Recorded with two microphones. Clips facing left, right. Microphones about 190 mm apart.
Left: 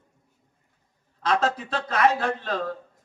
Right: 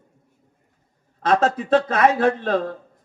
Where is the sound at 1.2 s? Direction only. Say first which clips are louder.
Right 5 dB; 50° right (ahead or behind).